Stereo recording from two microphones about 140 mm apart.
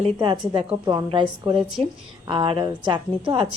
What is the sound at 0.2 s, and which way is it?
A woman's voice, 40° right (ahead or behind).